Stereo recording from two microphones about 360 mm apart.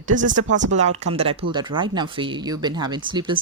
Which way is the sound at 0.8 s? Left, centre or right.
Centre.